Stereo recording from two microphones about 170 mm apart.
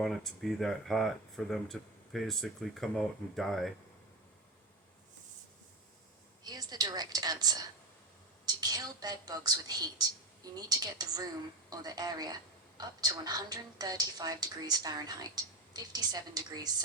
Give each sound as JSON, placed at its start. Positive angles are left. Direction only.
{"t": 0.0, "sound": "speech", "side_deg": 0}
{"t": 6.4, "sound": "a woman's voice", "side_deg": -25}